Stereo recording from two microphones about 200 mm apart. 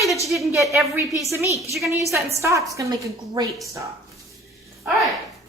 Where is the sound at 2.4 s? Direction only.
15° right (ahead or behind).